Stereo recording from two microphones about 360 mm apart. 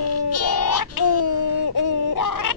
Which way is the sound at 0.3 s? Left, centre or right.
Left.